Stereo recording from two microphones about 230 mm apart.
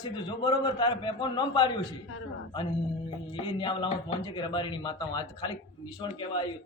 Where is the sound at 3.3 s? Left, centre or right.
Left.